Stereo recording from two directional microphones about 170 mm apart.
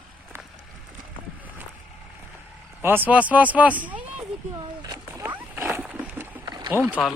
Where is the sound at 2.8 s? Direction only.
10° right (ahead or behind).